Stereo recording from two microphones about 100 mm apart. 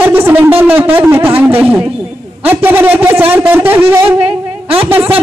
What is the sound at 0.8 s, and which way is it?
Speech, 20° right (ahead or behind).